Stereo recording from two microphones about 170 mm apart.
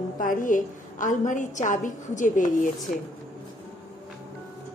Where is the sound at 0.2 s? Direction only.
50° left (ahead or behind).